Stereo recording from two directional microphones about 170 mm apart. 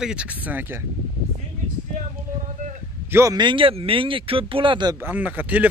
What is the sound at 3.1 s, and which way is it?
Speech, 20° right (ahead or behind).